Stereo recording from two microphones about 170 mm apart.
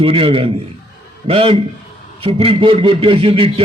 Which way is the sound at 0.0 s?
30° right (ahead or behind).